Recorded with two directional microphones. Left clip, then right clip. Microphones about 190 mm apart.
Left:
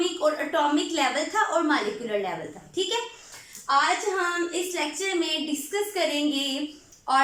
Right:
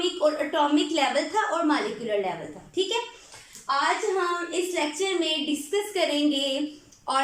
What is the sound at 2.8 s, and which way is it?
Speech, 10° right (ahead or behind).